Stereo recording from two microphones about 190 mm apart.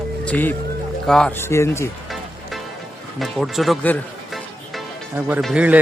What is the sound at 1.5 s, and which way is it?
Speech, 15° left (ahead or behind).